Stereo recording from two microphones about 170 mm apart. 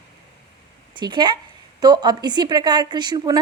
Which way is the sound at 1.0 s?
25° right (ahead or behind).